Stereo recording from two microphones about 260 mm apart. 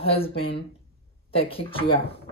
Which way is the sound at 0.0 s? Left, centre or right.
Left.